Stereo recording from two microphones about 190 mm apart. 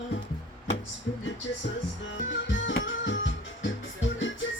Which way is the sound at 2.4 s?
80° left.